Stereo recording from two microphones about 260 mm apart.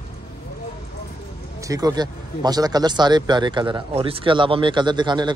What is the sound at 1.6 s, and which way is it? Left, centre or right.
Speech, centre.